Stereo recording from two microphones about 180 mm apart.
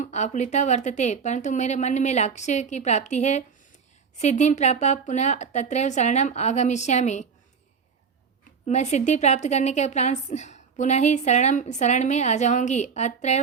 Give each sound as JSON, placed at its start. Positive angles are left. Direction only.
{"t": 0.0, "sound": "a woman's voice", "side_deg": 40}
{"t": 8.6, "sound": "a woman's voice", "side_deg": 40}